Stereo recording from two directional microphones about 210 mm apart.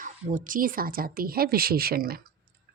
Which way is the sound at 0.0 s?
40° right (ahead or behind).